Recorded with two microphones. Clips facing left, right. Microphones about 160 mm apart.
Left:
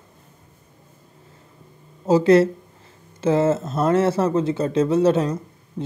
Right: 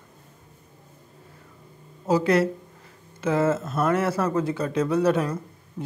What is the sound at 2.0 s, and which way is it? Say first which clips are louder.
Speech: left 6 dB; 25° left (ahead or behind).